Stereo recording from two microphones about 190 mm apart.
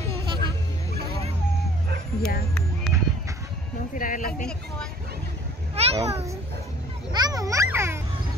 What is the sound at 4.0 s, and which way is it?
Speech, 45° left (ahead or behind).